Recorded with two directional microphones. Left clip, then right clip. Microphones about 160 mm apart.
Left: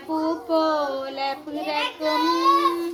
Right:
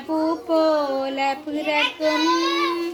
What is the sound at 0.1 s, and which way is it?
A child's voice, 60° right (ahead or behind).